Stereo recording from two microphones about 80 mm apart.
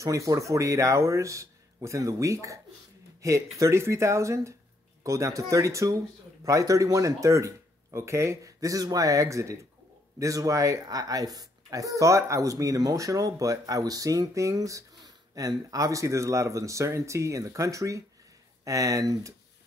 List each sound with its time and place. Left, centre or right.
0.0 s speech: right